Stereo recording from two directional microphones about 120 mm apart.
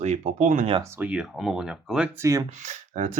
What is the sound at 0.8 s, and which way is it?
Speech, 20° right (ahead or behind).